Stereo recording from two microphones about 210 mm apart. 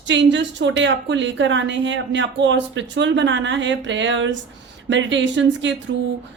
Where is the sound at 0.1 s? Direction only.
60° right (ahead or behind).